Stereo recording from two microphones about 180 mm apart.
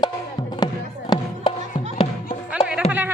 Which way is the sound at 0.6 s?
25° left (ahead or behind).